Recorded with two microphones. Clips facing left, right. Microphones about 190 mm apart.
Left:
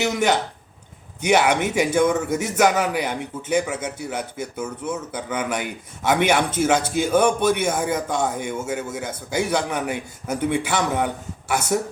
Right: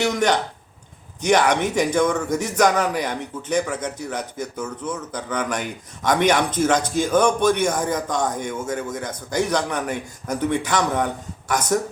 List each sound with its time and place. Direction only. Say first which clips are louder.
0.0 s a man's voice: right 1 dB; 5° left (ahead or behind)